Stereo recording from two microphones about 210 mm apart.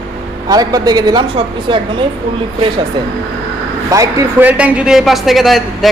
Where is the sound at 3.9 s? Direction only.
10° right (ahead or behind).